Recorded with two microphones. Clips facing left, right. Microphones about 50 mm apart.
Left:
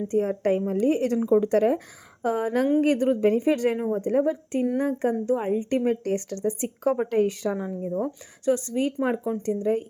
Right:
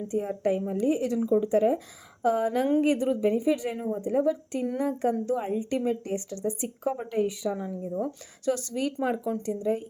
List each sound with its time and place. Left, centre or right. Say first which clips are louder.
0.1 s speech: left 4 dB; left
1.4 s speech: even; left
2.2 s a woman's voice: left 1 dB; left
3.8 s a woman's voice: left 3 dB; left
5.5 s speech: left 4 dB; left
7.5 s a woman's voice: left 3 dB; left
8.4 s speech: left 4 dB; left
9.5 s a woman's voice: left 4 dB; left